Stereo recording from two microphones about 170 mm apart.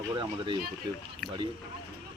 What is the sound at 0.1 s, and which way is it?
Speech, 30° right (ahead or behind).